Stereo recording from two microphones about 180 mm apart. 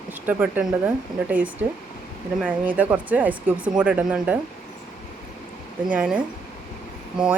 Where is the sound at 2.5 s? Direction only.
10° right (ahead or behind).